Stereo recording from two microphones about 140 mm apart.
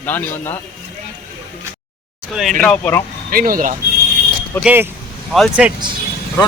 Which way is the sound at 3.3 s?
90° right.